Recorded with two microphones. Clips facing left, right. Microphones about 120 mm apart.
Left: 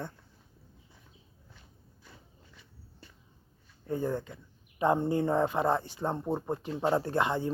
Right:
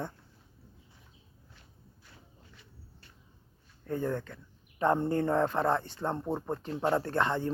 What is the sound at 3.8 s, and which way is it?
Speech, 10° left (ahead or behind).